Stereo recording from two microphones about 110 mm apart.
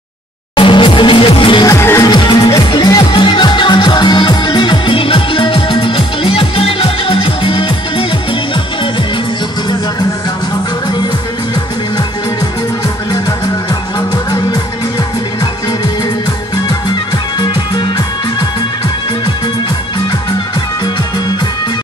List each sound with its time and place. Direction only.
0.6 s music: 50° left (ahead or behind)
1.7 s music: 25° left (ahead or behind)
2.0 s music: 40° left (ahead or behind)
13.7 s music: 35° left (ahead or behind)
16.6 s music: 40° left (ahead or behind)